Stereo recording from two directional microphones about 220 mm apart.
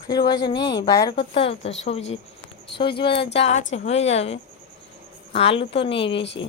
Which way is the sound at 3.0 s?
20° left (ahead or behind).